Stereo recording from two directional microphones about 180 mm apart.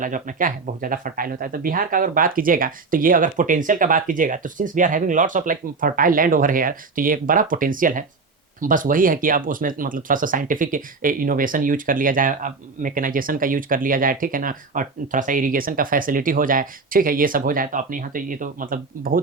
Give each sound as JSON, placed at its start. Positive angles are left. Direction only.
{"t": 0.0, "sound": "speech", "side_deg": -45}